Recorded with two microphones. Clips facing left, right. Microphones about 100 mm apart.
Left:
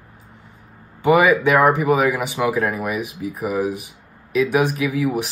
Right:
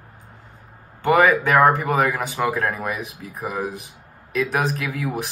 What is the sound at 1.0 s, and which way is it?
Speech, 15° left (ahead or behind).